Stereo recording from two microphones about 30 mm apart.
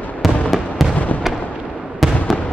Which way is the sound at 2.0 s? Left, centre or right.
Centre.